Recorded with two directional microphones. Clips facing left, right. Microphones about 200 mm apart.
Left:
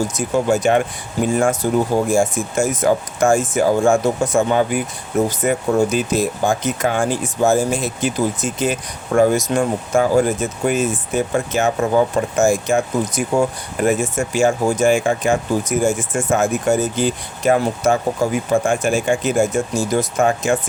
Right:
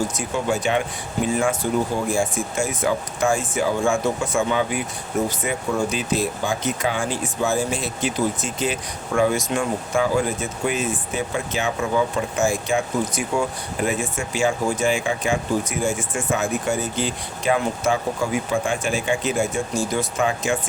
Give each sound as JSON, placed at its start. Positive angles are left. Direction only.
{"t": 0.2, "sound": "speech", "side_deg": 45}